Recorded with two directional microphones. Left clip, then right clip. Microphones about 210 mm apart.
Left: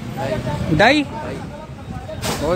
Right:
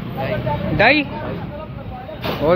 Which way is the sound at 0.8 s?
30° left (ahead or behind).